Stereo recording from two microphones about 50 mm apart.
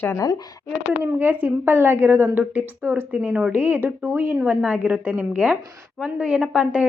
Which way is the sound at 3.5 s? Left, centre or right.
Right.